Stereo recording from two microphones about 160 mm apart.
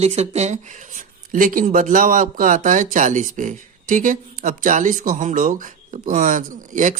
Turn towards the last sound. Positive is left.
turn(degrees=-50)  # may be behind; listen again after turning